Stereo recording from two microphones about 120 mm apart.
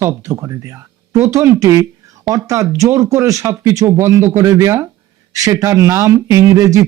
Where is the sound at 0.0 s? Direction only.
25° right (ahead or behind).